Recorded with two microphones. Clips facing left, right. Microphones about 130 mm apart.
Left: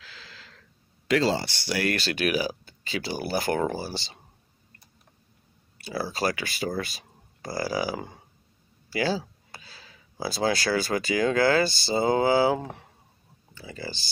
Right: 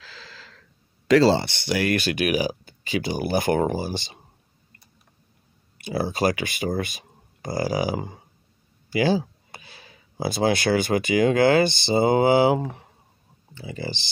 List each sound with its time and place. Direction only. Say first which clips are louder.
0.0 s gasp: right 4 dB; 35° right (ahead or behind)
1.0 s speech: right 7 dB; 35° right (ahead or behind)
1.4 s speech: right 3 dB; 20° right (ahead or behind)
5.8 s speech: right 5 dB; 20° right (ahead or behind)